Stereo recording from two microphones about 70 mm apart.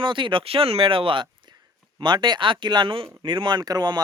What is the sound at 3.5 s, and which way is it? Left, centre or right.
Speech, right.